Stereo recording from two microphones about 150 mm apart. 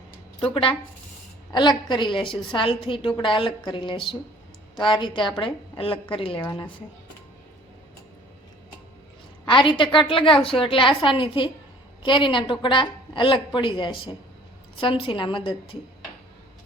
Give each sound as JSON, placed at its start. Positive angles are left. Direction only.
{"t": 0.5, "sound": "a woman's voice", "side_deg": 35}
{"t": 9.5, "sound": "a woman's voice", "side_deg": 35}